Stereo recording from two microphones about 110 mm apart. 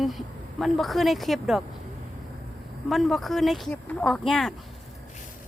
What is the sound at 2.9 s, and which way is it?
Speech, centre (ahead or behind).